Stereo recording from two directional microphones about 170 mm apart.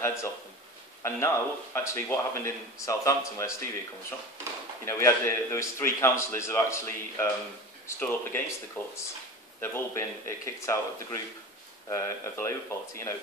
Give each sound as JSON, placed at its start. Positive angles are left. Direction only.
{"t": 0.0, "sound": "speech", "side_deg": 15}
{"t": 4.8, "sound": "speech", "side_deg": 15}